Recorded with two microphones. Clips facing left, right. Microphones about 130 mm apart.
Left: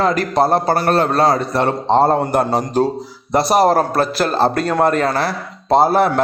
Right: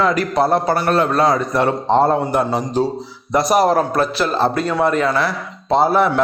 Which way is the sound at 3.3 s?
30° left (ahead or behind).